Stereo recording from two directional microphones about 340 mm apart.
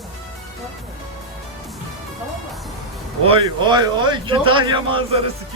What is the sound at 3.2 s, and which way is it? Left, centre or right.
A man's voice, centre.